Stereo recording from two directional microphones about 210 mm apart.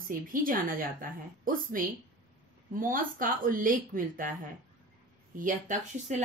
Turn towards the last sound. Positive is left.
turn(degrees=-40)  # may be behind; listen again after turning